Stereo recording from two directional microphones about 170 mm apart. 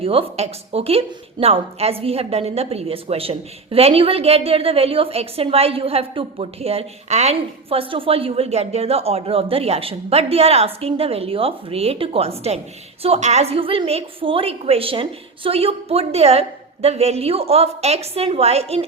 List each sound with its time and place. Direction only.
0.0 s a woman's voice: 35° right (ahead or behind)